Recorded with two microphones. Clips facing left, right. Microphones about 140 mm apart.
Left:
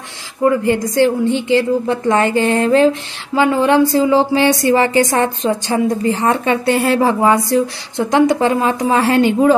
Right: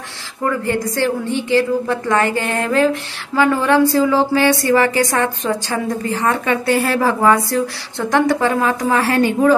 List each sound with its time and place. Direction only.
0.4 s a woman's voice: 20° left (ahead or behind)